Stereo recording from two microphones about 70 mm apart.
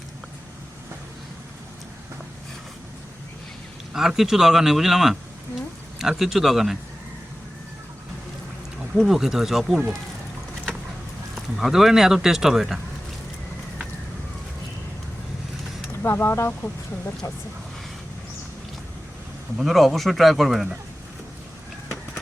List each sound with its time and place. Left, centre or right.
3.9 s speech: centre
9.0 s speech: centre
11.3 s speech: centre
15.9 s speech: left
19.5 s speech: centre